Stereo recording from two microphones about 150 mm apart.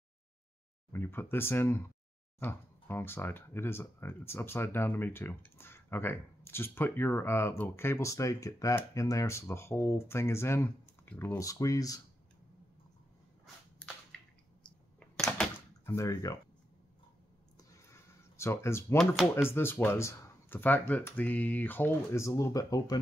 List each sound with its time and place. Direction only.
0.9 s speech: 15° left (ahead or behind)
14.1 s squish: 5° left (ahead or behind)
14.6 s a sound: 5° left (ahead or behind)
15.8 s speech: 20° left (ahead or behind)
17.6 s a sound: 20° left (ahead or behind)
19.5 s speech: 15° left (ahead or behind)